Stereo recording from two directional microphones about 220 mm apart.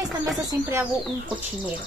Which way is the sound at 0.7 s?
5° right (ahead or behind).